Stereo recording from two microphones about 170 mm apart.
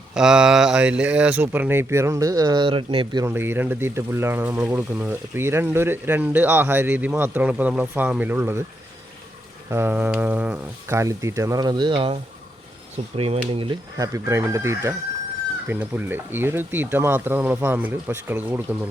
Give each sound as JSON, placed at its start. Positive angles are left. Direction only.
{"t": 0.1, "sound": "speech", "side_deg": -5}
{"t": 3.2, "sound": "speech", "side_deg": -10}
{"t": 9.6, "sound": "speech", "side_deg": -15}
{"t": 13.9, "sound": "speech", "side_deg": -20}